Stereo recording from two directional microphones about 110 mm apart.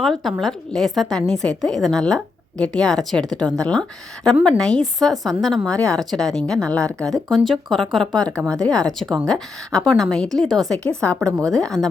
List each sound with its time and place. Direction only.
0.0 s a woman's voice: centre (ahead or behind)
11.3 s a woman's voice: 30° right (ahead or behind)
11.5 s a woman's voice: 5° left (ahead or behind)